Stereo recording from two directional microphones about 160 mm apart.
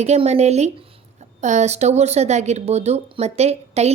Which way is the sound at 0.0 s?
40° right (ahead or behind).